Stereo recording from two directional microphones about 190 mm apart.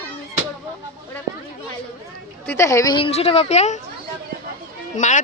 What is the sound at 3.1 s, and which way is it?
Speech, 35° left (ahead or behind).